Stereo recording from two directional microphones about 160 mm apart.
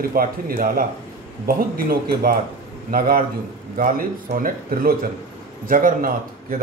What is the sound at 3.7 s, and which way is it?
A man's voice, 55° right (ahead or behind).